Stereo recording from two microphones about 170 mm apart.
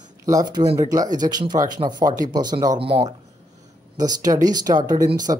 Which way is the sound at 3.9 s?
20° right (ahead or behind).